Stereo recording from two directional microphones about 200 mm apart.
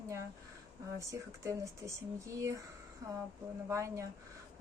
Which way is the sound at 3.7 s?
15° right (ahead or behind).